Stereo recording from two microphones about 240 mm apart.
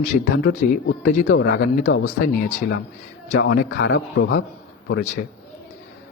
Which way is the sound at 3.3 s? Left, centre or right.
Left.